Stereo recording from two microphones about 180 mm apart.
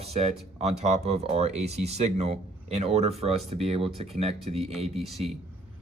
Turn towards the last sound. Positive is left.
turn(degrees=0)  # may be behind; listen again after turning